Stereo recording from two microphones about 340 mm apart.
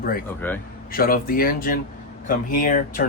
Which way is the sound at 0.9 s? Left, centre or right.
Left.